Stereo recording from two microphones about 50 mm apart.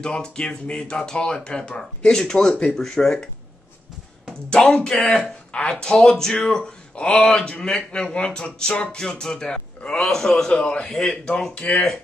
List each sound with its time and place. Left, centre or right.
0.0 s speech: centre
4.5 s a man's voice: left
4.8 s speech: centre
5.5 s speech: left
5.8 s a man's voice: centre